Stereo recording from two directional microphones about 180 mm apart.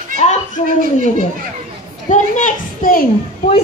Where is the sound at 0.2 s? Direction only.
45° left (ahead or behind).